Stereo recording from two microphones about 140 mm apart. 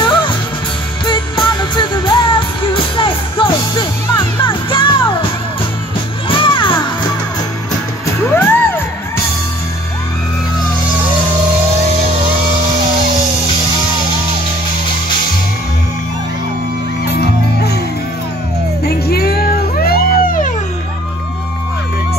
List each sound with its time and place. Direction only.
0.0 s music: 35° left (ahead or behind)
6.2 s music: 35° left (ahead or behind)
8.3 s music: 15° left (ahead or behind)
19.1 s music: 90° left